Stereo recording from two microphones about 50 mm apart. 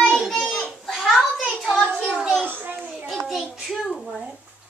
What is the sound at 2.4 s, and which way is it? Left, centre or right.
Speech, right.